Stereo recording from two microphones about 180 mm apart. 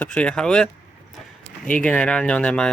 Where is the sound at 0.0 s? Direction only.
5° left (ahead or behind).